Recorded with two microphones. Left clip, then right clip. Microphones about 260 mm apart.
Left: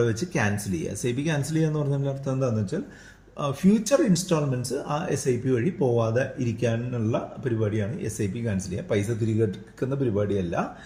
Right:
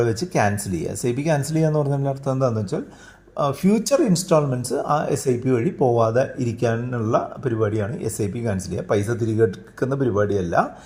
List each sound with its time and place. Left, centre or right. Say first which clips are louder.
0.0 s speech: right 5 dB; right